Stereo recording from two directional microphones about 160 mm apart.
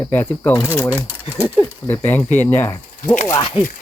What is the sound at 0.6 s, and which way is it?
Speech, 10° right (ahead or behind).